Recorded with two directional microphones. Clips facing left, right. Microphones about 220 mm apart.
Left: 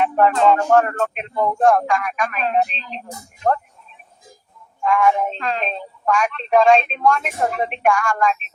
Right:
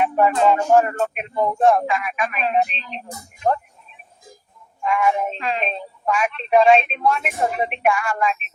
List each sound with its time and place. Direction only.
0.0 s a woman's voice: 10° right (ahead or behind)
4.9 s speech: 10° right (ahead or behind)